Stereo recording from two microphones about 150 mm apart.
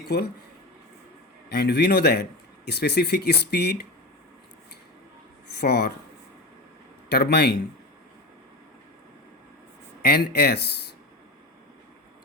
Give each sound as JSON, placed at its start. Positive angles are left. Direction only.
{"t": 1.5, "sound": "speech", "side_deg": 90}
{"t": 5.5, "sound": "speech", "side_deg": 90}
{"t": 7.1, "sound": "speech", "side_deg": 90}
{"t": 10.0, "sound": "speech", "side_deg": 90}